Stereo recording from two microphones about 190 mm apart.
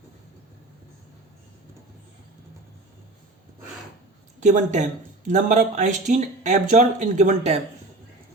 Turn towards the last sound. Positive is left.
turn(degrees=-35)  # may be behind; listen again after turning